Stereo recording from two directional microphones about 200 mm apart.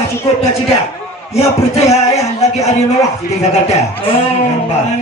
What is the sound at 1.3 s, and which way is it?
Speech, 30° left (ahead or behind).